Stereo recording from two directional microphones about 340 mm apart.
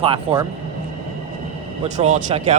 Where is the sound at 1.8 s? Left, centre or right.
Centre.